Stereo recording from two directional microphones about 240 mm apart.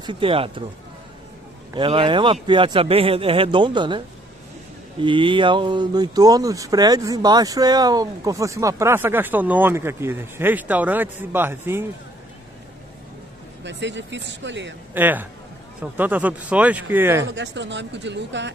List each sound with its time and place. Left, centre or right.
0.0 s speech: right
1.8 s speech: right
5.0 s speech: right
13.7 s speech: right
15.0 s speech: centre
17.3 s speech: right